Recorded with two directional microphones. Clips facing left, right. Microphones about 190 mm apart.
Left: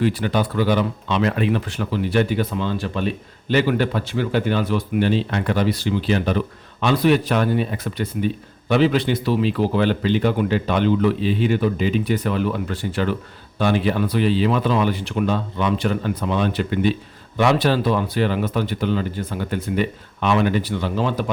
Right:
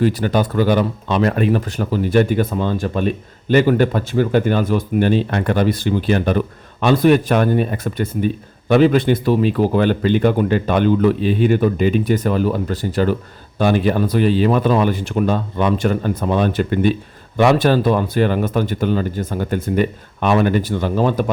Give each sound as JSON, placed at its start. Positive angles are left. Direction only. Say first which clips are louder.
{"t": 0.0, "sound": "speech", "louder": "right 3 dB", "side_deg": -40}